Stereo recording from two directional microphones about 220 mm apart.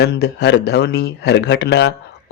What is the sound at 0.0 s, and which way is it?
Speech, 50° left (ahead or behind).